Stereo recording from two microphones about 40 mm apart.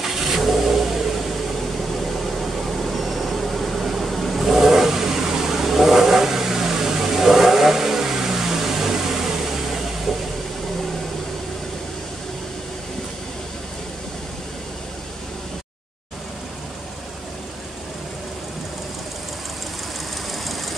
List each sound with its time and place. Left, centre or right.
0.0 s vehicle: centre